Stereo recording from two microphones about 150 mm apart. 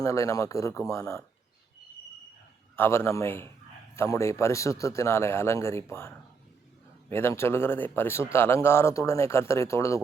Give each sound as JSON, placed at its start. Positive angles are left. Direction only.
{"t": 0.0, "sound": "speech", "side_deg": 20}
{"t": 2.7, "sound": "speech", "side_deg": 15}